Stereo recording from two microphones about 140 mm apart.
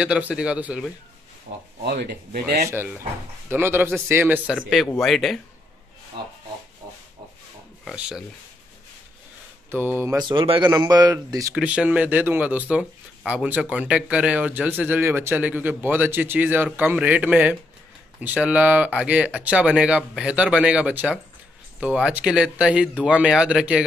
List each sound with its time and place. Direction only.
0.0 s speech: 10° right (ahead or behind)
1.5 s speech: 70° right (ahead or behind)
2.3 s speech: 90° right
3.4 s speech: 15° right (ahead or behind)
4.9 s speech: centre (ahead or behind)
7.8 s speech: 5° right (ahead or behind)
9.7 s speech: 15° right (ahead or behind)
10.2 s speech: 40° right (ahead or behind)
10.7 s a man's voice: 25° right (ahead or behind)
11.5 s speech: 10° right (ahead or behind)